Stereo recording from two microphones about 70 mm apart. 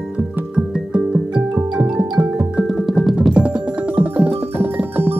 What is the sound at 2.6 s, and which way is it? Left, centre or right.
Music, centre.